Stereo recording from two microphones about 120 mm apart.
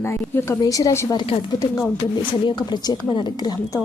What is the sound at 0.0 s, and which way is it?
Speech, 20° left (ahead or behind).